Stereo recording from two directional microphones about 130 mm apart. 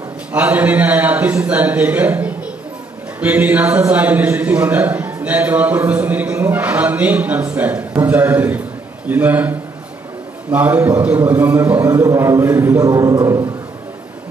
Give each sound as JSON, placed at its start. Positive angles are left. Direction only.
{"t": 0.3, "sound": "a man's voice", "side_deg": -15}